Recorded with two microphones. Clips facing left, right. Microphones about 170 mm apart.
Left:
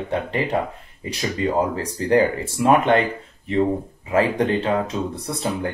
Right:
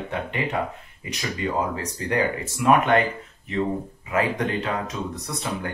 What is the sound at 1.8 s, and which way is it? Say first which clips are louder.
Speech: left 7 dB; 30° left (ahead or behind).